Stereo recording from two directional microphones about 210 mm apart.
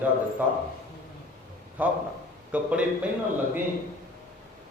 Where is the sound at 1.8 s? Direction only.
5° right (ahead or behind).